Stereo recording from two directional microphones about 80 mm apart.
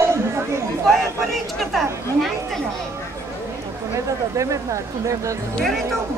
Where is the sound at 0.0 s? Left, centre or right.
Right.